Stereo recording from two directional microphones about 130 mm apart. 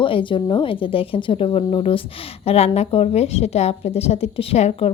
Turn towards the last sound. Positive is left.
turn(degrees=55)  # may be behind; listen again after turning